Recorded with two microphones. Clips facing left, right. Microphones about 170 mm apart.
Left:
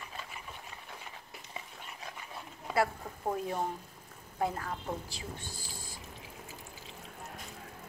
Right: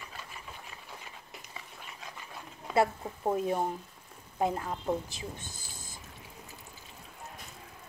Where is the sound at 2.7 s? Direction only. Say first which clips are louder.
Right 3 dB; 20° right (ahead or behind).